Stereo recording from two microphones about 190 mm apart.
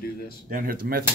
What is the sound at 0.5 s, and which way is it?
Speech, 50° right (ahead or behind).